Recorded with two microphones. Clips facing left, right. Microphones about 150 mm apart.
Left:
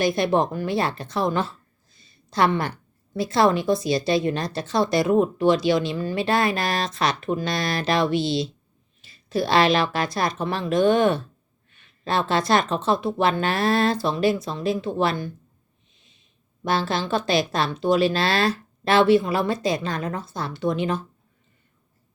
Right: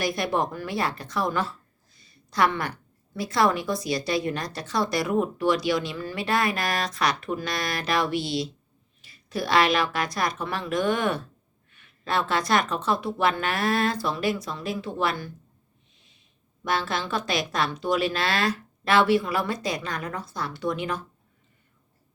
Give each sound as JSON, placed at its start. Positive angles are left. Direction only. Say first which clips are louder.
{"t": 0.0, "sound": "a woman's voice", "louder": "left 5 dB", "side_deg": 25}
{"t": 16.6, "sound": "a woman's voice", "louder": "left 4 dB", "side_deg": 30}